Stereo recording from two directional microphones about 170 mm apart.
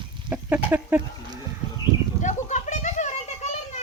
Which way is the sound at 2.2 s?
45° left (ahead or behind).